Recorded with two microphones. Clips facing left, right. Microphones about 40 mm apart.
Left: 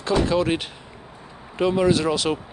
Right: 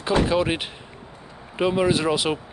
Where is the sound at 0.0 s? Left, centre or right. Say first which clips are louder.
Even; centre.